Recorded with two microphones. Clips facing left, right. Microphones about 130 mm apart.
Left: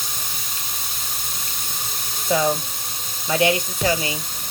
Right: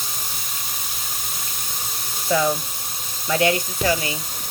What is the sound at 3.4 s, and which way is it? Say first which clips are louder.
Speech: left 1 dB; 20° left (ahead or behind).